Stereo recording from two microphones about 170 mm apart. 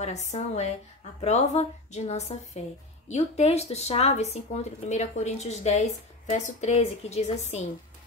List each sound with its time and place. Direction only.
0.0 s speech: 40° left (ahead or behind)